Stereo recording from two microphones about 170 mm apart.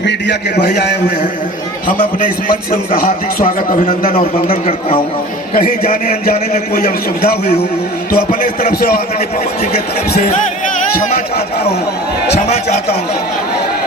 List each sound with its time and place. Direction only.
0.0 s a man's voice: 90° left; by 0.9 s 70° left (ahead or behind)
2.9 s a man's voice: 55° left (ahead or behind)
4.1 s a man's voice: 35° left (ahead or behind)
5.5 s a man's voice: 55° left (ahead or behind)